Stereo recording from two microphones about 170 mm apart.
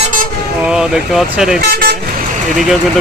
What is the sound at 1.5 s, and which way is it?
Speech, 60° right (ahead or behind).